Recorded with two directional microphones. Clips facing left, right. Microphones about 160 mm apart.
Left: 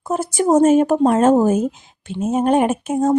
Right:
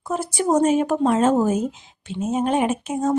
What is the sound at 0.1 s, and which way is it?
A woman's voice, 45° left (ahead or behind).